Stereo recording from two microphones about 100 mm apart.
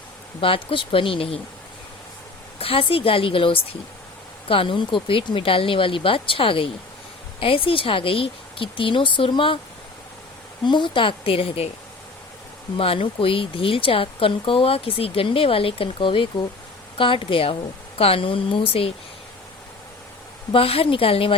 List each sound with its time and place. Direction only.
0.3 s speech: 65° left (ahead or behind)
2.6 s speech: 70° left (ahead or behind)
10.6 s speech: 50° left (ahead or behind); by 11.7 s 75° left (ahead or behind)
12.7 s speech: 70° left (ahead or behind)
20.5 s speech: 70° left (ahead or behind)